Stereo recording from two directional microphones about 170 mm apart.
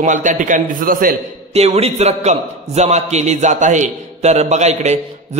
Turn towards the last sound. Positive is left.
turn(degrees=-40)  # may be behind; listen again after turning